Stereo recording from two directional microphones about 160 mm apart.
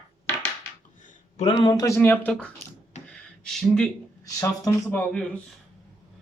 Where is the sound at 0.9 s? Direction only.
50° left (ahead or behind).